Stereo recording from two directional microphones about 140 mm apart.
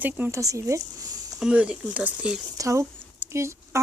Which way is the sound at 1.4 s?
5° right (ahead or behind).